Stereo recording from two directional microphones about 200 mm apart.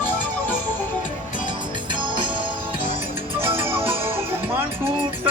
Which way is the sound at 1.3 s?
25° right (ahead or behind).